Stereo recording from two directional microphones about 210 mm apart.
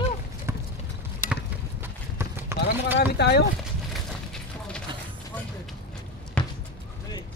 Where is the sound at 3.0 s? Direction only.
55° left (ahead or behind).